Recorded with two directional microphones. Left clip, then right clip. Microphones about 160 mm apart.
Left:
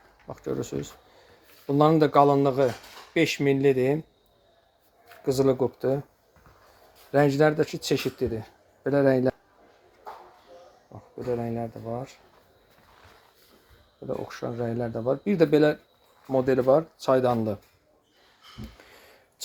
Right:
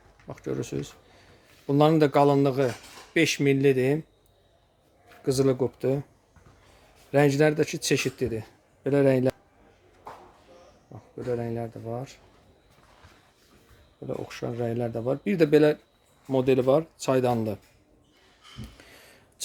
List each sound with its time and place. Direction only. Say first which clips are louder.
0.3 s speech: left 1 dB; 15° right (ahead or behind)
5.2 s speech: left 1 dB; 15° right (ahead or behind)
7.1 s speech: even; 20° right (ahead or behind)
11.2 s speech: left 1 dB; 20° right (ahead or behind)
14.1 s speech: left 1 dB; 25° right (ahead or behind)